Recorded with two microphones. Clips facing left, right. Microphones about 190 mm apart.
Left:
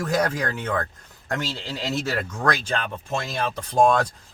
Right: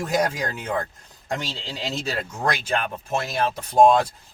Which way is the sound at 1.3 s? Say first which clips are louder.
Left 1 dB; 15° right (ahead or behind).